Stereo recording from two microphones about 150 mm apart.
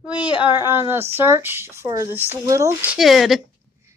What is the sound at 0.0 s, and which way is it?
Speech, 10° right (ahead or behind).